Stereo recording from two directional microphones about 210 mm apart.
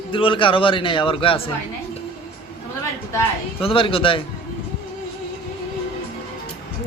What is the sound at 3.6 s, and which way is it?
Speech, 25° left (ahead or behind).